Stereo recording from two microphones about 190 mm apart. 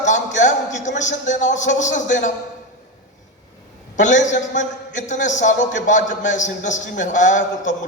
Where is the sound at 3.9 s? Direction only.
40° left (ahead or behind).